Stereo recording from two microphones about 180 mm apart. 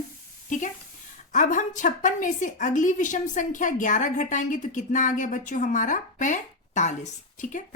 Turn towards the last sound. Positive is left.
turn(degrees=40)  # may be behind; listen again after turning